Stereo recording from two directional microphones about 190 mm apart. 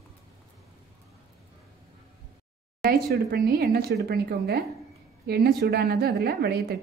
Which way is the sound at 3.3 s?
55° right (ahead or behind).